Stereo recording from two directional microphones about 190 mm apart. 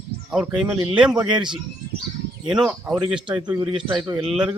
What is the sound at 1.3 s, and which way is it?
Speech, 25° right (ahead or behind).